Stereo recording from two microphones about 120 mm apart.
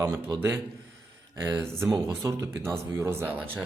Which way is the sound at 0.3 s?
20° right (ahead or behind).